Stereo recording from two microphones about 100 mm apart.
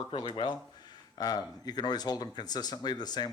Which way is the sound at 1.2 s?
40° left (ahead or behind).